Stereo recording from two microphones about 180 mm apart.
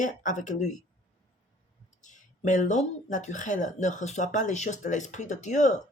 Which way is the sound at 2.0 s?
45° left (ahead or behind).